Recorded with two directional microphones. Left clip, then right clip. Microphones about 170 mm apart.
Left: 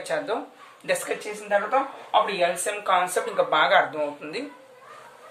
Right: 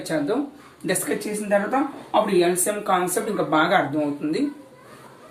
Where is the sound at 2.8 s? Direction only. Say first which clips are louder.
Left 1 dB; 30° left (ahead or behind).